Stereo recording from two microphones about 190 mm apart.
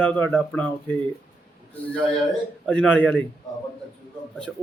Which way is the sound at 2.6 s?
5° left (ahead or behind).